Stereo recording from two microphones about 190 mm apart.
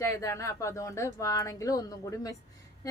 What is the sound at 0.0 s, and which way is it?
A woman's voice, 15° left (ahead or behind).